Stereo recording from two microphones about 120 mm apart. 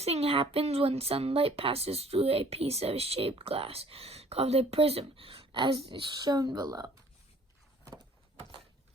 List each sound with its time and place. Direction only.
0.0 s a woman's voice: 55° right (ahead or behind); by 7.0 s 30° right (ahead or behind)